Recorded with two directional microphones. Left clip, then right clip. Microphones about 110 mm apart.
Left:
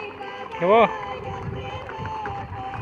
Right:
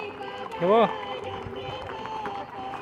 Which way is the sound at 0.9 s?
Centre (ahead or behind).